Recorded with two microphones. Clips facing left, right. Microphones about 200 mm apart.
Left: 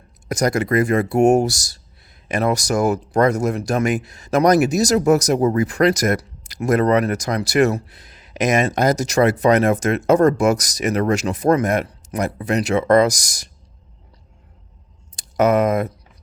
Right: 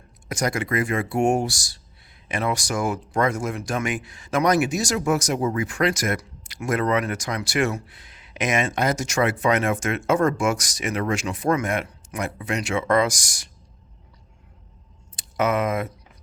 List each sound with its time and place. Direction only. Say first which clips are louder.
0.3 s speech: left 6 dB; 40° left (ahead or behind)
15.1 s speech: left 6 dB; 40° left (ahead or behind)